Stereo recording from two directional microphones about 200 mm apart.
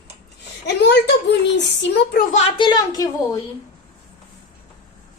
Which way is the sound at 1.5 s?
60° left (ahead or behind).